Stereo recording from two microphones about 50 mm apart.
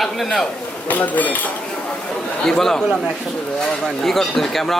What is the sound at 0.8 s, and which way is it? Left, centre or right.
Speech, left.